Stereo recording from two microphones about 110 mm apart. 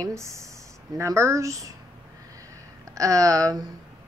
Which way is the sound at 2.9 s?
30° right (ahead or behind).